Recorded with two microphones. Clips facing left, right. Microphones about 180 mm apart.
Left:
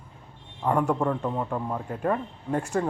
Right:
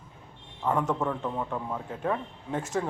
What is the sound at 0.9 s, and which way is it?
Speech, 15° left (ahead or behind).